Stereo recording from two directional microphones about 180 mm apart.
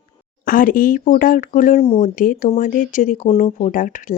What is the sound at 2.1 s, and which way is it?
Speech, 50° left (ahead or behind).